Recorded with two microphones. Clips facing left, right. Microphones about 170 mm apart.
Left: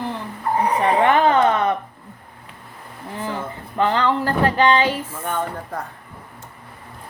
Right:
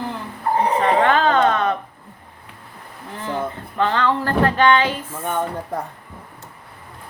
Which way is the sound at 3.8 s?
15° left (ahead or behind).